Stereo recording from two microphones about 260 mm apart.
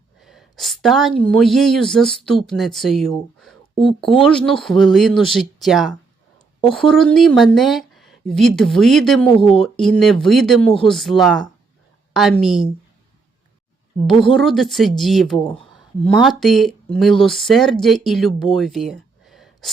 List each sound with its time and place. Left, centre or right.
0.2 s a woman's voice: centre
9.4 s speech: left
9.7 s speech: centre
14.1 s speech: centre
14.3 s speech: centre
18.5 s a sound: centre